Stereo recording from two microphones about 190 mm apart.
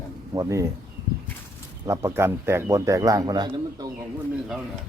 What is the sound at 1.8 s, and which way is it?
A man's voice, 15° right (ahead or behind).